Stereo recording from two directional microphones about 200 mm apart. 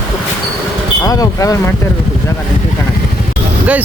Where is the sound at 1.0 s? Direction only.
15° left (ahead or behind).